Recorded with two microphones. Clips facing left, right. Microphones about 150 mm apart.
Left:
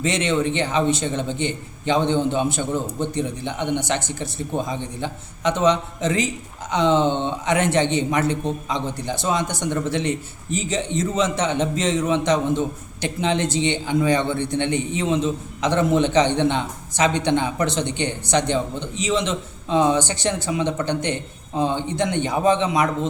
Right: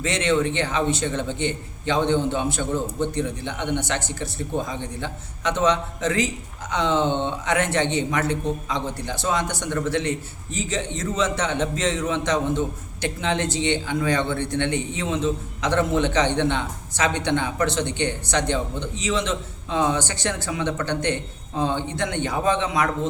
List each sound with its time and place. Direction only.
0.0 s a man's voice: 20° left (ahead or behind)